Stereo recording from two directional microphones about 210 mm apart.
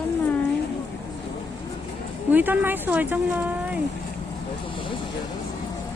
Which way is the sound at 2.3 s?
10° right (ahead or behind).